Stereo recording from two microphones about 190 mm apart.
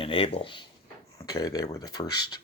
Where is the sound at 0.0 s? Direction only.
30° left (ahead or behind).